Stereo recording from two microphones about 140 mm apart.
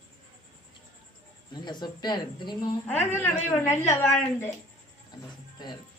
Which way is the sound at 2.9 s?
15° left (ahead or behind).